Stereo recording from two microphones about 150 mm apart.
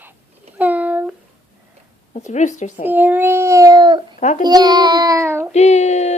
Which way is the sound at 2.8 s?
10° right (ahead or behind).